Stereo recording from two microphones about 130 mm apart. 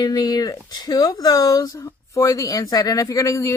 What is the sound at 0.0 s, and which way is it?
Speech, 30° left (ahead or behind).